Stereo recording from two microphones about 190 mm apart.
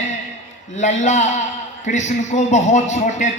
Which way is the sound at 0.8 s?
40° left (ahead or behind).